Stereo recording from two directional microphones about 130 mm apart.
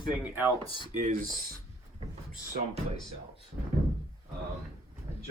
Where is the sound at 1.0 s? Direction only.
90° right.